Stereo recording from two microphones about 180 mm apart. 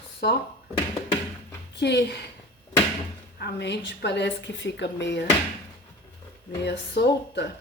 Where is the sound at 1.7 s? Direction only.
70° left (ahead or behind).